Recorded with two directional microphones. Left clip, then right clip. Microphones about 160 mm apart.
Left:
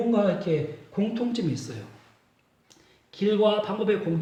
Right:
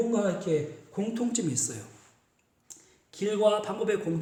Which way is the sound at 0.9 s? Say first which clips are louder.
Left 2 dB; 30° right (ahead or behind).